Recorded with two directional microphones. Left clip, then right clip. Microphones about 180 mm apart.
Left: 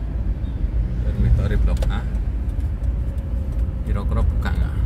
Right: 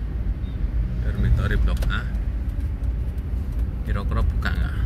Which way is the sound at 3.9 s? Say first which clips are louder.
Left 1 dB; 5° left (ahead or behind).